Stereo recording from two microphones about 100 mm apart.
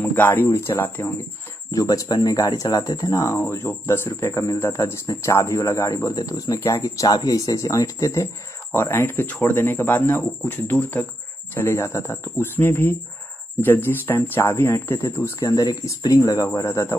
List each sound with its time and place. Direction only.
0.0 s speech: 15° left (ahead or behind)
1.7 s speech: 35° left (ahead or behind)